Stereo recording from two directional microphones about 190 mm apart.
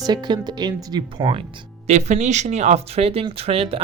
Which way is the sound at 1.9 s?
35° right (ahead or behind).